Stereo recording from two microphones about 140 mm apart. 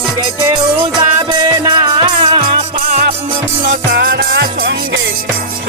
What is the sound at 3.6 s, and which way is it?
Music, 70° right (ahead or behind).